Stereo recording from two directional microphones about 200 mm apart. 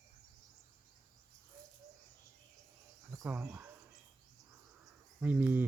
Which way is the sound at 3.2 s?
10° right (ahead or behind).